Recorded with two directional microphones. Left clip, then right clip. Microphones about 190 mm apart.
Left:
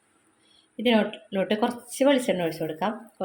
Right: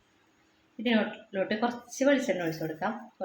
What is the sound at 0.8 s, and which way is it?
Speech, 40° left (ahead or behind).